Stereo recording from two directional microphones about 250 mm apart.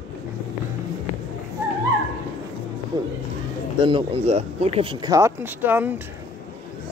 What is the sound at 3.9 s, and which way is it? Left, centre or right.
Speech, right.